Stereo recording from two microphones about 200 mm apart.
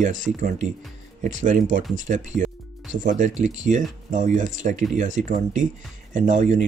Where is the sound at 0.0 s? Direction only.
40° right (ahead or behind).